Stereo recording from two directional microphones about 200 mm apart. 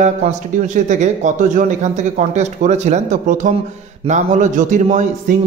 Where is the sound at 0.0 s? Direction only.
35° right (ahead or behind).